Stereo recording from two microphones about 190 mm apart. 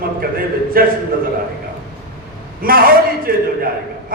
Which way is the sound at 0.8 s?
50° right (ahead or behind).